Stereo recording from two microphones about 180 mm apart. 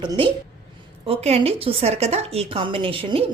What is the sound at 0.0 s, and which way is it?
A woman's voice, 25° right (ahead or behind).